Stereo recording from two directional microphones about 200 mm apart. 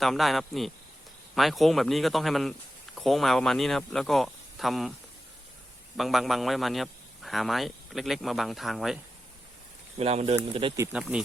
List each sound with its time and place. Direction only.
0.0 s speech: centre (ahead or behind)
6.0 s speech: centre (ahead or behind)
10.0 s speech: 30° right (ahead or behind)
10.9 s speech: 5° right (ahead or behind)